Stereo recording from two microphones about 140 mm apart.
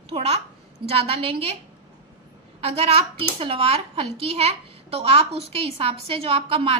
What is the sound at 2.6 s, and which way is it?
A child's voice, 45° right (ahead or behind).